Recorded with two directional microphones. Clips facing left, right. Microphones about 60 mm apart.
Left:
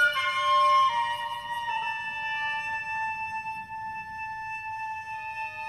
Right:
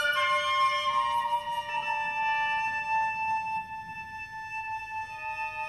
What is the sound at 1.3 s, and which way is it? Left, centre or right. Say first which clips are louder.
Music: right 1 dB; right.